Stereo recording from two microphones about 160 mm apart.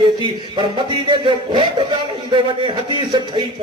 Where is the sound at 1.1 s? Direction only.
30° right (ahead or behind).